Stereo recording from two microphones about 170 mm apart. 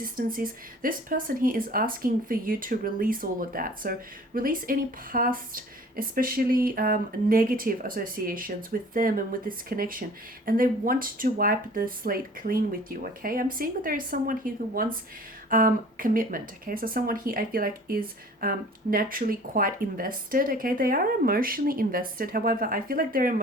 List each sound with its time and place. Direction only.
0.0 s speech: 55° right (ahead or behind)